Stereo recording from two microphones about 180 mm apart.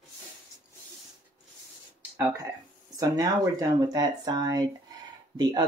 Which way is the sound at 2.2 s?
15° right (ahead or behind).